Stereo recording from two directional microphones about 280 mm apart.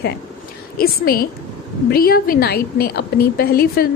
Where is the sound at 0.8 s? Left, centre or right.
Left.